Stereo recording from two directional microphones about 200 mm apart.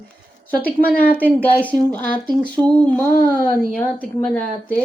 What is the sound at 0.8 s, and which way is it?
Speech, 45° left (ahead or behind).